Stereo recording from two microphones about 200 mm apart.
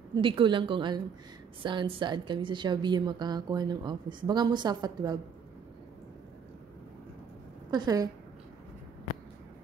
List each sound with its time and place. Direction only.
0.1 s a woman's voice: 25° right (ahead or behind)
7.7 s a woman's voice: 20° right (ahead or behind)